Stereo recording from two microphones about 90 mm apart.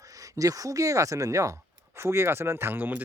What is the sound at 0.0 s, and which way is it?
Speech, 40° right (ahead or behind).